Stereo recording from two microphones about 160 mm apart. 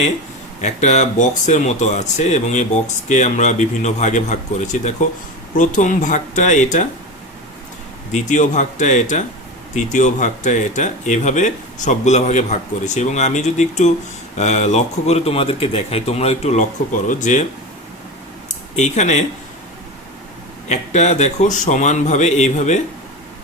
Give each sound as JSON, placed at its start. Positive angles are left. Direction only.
{"t": 0.6, "sound": "speech", "side_deg": 45}
{"t": 8.1, "sound": "speech", "side_deg": 50}
{"t": 18.8, "sound": "speech", "side_deg": 45}
{"t": 20.7, "sound": "speech", "side_deg": 45}